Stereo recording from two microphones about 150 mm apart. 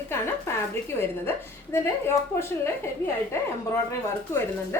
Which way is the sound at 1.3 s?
15° left (ahead or behind).